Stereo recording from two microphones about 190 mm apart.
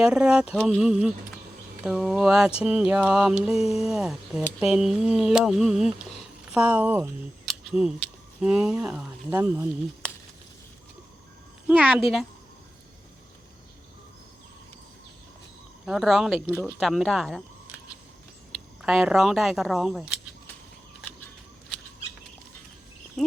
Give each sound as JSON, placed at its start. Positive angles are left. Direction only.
{"t": 0.0, "sound": "speech", "side_deg": -5}
{"t": 7.4, "sound": "camera", "side_deg": 0}
{"t": 8.4, "sound": "speech", "side_deg": -5}
{"t": 9.3, "sound": "speech", "side_deg": -15}
{"t": 11.7, "sound": "speech", "side_deg": -5}
{"t": 15.9, "sound": "speech", "side_deg": 0}
{"t": 18.8, "sound": "speech", "side_deg": -5}
{"t": 23.2, "sound": "speech", "side_deg": 5}